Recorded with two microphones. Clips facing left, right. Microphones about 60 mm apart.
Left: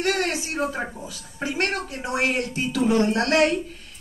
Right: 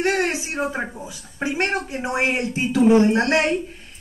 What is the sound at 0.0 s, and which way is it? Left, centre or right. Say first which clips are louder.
A man's voice: right 3 dB; right.